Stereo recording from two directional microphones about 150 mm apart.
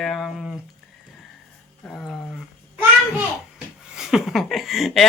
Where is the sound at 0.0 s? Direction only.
Centre (ahead or behind).